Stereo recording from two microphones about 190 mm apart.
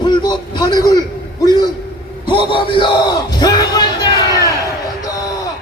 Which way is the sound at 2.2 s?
25° left (ahead or behind).